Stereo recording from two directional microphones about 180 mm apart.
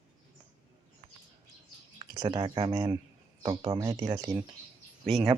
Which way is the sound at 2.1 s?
25° right (ahead or behind).